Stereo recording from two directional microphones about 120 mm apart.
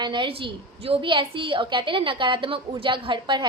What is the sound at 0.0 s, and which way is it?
A woman's voice, 40° right (ahead or behind).